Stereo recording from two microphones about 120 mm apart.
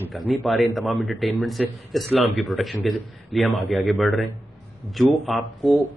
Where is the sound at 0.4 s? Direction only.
Centre (ahead or behind).